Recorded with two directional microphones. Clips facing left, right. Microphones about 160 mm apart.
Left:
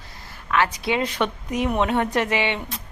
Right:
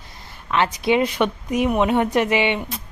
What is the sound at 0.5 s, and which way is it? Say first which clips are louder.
A woman's voice: right 3 dB; 20° right (ahead or behind).